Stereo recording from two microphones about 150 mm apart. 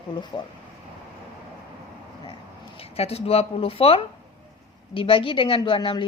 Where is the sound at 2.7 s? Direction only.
40° left (ahead or behind).